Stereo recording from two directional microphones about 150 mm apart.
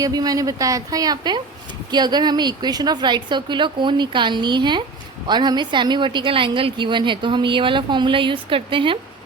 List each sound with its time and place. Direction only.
0.0 s a woman's voice: 25° right (ahead or behind)